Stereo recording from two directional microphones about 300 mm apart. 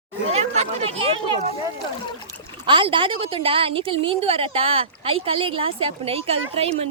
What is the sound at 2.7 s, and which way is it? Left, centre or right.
A woman's voice, centre.